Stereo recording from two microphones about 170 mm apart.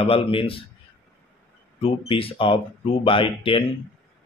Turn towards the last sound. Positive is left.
turn(degrees=30)  # may be behind; listen again after turning